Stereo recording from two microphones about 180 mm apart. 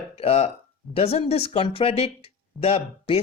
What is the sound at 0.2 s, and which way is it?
Speech, 35° left (ahead or behind).